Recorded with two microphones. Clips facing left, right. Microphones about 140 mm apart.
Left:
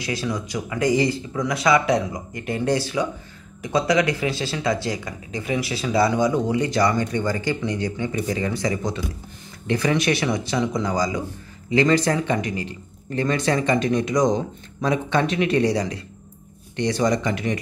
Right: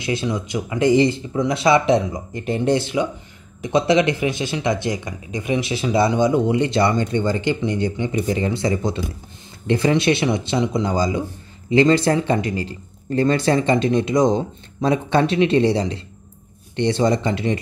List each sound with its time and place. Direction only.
0.0 s speech: 25° right (ahead or behind)